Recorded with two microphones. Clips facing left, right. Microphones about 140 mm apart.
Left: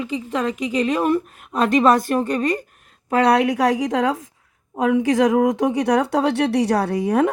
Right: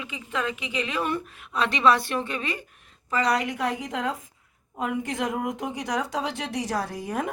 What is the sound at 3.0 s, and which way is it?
Speech, 60° left (ahead or behind).